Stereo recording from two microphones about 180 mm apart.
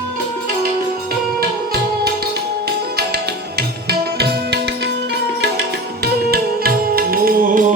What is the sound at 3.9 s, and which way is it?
Music, 65° right (ahead or behind).